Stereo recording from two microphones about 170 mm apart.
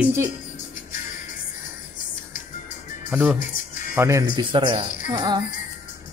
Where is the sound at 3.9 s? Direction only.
15° right (ahead or behind).